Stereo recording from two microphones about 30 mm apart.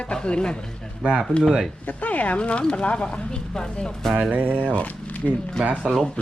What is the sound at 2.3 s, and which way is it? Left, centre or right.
Speech, left.